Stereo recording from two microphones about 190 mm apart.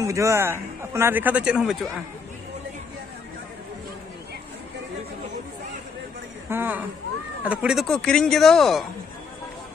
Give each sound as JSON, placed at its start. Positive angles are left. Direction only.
{"t": 0.0, "sound": "a man's voice", "side_deg": -15}
{"t": 6.5, "sound": "a man's voice", "side_deg": -10}